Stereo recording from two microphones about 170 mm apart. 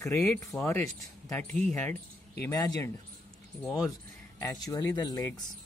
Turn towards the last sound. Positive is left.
turn(degrees=20)  # may be behind; listen again after turning